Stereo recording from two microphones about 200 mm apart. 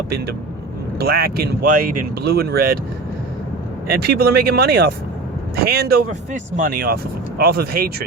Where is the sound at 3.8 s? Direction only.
50° right (ahead or behind).